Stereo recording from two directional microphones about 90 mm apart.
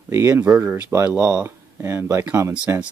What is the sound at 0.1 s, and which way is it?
Speech, 30° right (ahead or behind).